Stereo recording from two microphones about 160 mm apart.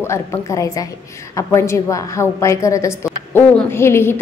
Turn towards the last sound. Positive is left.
turn(degrees=15)  # may be behind; listen again after turning